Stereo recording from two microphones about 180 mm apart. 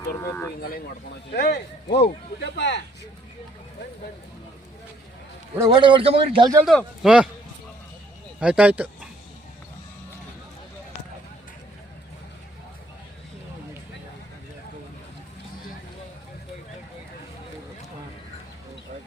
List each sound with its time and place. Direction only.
0.2 s speech: 15° left (ahead or behind)
1.3 s speech: 65° left (ahead or behind)
5.5 s a man's voice: 20° right (ahead or behind)
6.7 s speech: centre (ahead or behind)
8.4 s speech: 5° right (ahead or behind)